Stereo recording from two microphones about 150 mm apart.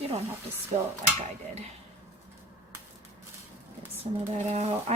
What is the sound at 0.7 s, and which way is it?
Speech, 50° right (ahead or behind).